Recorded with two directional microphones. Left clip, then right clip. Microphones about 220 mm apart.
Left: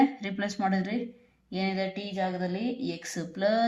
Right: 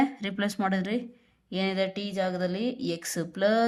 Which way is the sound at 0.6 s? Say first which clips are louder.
Left 1 dB; 45° right (ahead or behind).